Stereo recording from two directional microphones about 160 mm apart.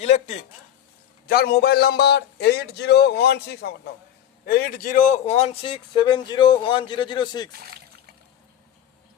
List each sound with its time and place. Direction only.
0.0 s a sound: 45° left (ahead or behind)
1.3 s a man's voice: 70° left (ahead or behind); by 3.8 s 90° left
4.4 s speech: 70° left (ahead or behind); by 7.5 s 30° left (ahead or behind)
7.5 s speech: 75° right (ahead or behind)